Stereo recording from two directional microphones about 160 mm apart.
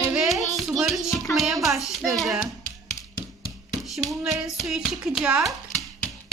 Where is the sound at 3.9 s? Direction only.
Centre (ahead or behind).